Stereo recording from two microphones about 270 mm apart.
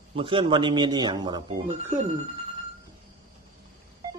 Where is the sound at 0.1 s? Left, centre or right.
Centre.